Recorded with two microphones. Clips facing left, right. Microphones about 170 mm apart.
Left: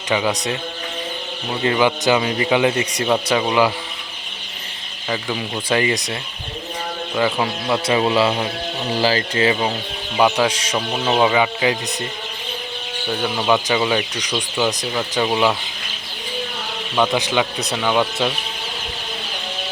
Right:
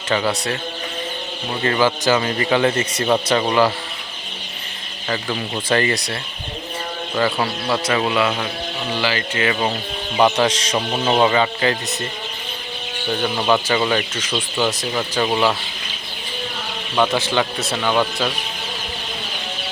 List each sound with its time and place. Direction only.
0.1 s speech: 15° left (ahead or behind)
1.6 s speech: 15° left (ahead or behind)
5.0 s speech: 10° left (ahead or behind)
7.2 s speech: 10° left (ahead or behind)
7.9 s speech: 25° left (ahead or behind)
8.9 s speech: 40° left (ahead or behind)
10.2 s speech: 10° left (ahead or behind)
10.8 s speech: 5° right (ahead or behind)
11.2 s speech: 10° left (ahead or behind)
13.1 s speech: centre (ahead or behind)
16.9 s speech: centre (ahead or behind)
17.2 s speech: 15° left (ahead or behind)